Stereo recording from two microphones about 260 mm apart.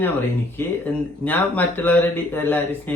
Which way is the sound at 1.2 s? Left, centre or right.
Centre.